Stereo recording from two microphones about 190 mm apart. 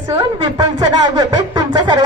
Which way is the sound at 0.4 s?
20° right (ahead or behind).